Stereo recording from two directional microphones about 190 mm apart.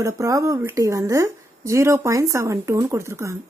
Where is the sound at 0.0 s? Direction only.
15° right (ahead or behind).